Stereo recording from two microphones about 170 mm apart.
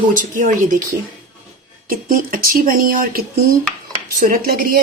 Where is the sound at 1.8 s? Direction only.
60° right (ahead or behind).